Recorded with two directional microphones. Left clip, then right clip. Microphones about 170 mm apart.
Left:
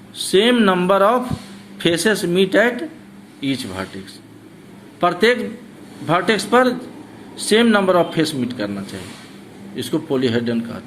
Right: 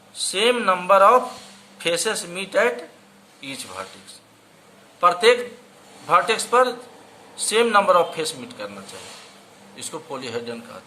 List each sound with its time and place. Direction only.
0.2 s a man's voice: 15° left (ahead or behind)
4.9 s a man's voice: 15° left (ahead or behind)
9.7 s a man's voice: 10° left (ahead or behind)